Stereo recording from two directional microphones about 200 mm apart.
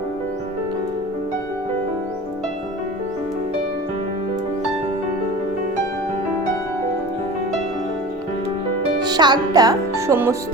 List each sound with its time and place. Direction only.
9.0 s speech: 20° right (ahead or behind)